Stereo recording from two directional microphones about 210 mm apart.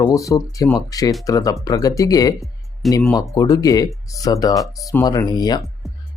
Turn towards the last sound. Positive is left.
turn(degrees=20)  # may be behind; listen again after turning